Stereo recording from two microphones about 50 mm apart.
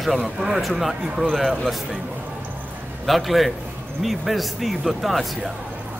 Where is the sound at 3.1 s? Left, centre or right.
Centre.